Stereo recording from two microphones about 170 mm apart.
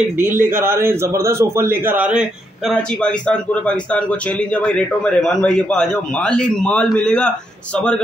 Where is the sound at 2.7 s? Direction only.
5° left (ahead or behind).